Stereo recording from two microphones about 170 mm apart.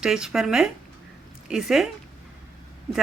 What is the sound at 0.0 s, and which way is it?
Speech, 5° right (ahead or behind).